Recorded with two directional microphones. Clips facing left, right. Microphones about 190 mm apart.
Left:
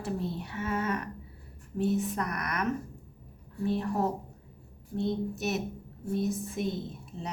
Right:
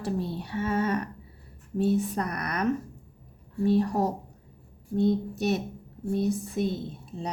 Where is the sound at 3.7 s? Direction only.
35° right (ahead or behind).